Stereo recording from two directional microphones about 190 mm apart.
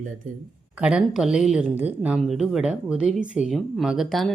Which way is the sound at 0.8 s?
5° right (ahead or behind).